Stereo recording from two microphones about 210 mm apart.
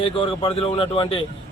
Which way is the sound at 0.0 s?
25° left (ahead or behind).